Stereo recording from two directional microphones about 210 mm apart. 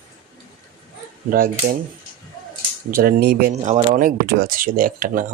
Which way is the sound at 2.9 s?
45° right (ahead or behind).